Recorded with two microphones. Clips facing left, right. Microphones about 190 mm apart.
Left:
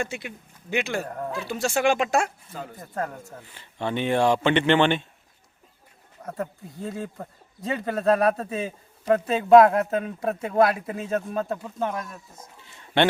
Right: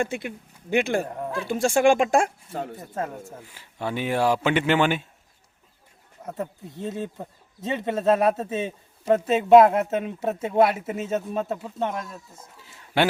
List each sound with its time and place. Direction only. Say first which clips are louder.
0.0 s speech: right 4 dB; 50° right (ahead or behind)
1.0 s speech: even; 15° right (ahead or behind)
1.5 s speech: right 4 dB; 50° right (ahead or behind)
2.9 s speech: left 3 dB; 20° right (ahead or behind)
6.2 s a man's voice: even; 20° right (ahead or behind)
12.7 s a sound: left 1 dB; 5° right (ahead or behind)